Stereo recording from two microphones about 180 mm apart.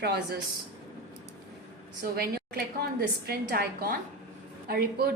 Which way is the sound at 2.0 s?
60° right (ahead or behind).